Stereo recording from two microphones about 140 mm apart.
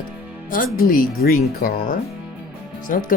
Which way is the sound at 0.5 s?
80° left.